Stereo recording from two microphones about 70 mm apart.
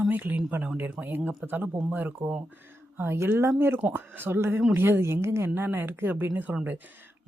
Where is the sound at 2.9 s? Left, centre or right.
Right.